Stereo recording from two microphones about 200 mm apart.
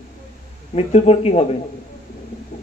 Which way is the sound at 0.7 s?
30° left (ahead or behind).